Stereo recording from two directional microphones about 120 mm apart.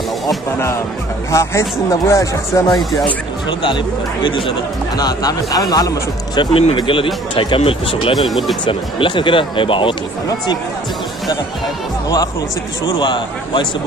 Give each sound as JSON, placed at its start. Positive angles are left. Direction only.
{"t": 1.3, "sound": "speech", "side_deg": 20}
{"t": 3.4, "sound": "speech", "side_deg": 45}
{"t": 4.9, "sound": "speech", "side_deg": 35}
{"t": 8.3, "sound": "speech", "side_deg": 0}
{"t": 8.6, "sound": "speech", "side_deg": 40}
{"t": 12.9, "sound": "speech", "side_deg": 40}